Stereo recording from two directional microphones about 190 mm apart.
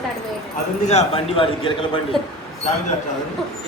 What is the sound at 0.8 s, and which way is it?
A man's voice, 35° left (ahead or behind).